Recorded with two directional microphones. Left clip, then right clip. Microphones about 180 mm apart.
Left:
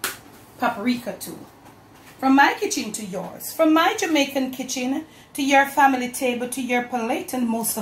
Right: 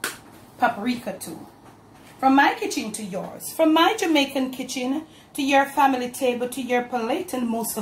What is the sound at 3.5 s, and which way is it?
A woman's voice, 25° right (ahead or behind).